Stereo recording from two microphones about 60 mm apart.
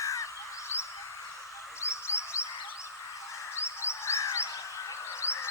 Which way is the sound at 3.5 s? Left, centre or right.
Left.